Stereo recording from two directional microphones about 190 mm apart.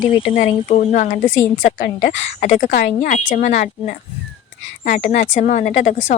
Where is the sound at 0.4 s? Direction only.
40° left (ahead or behind).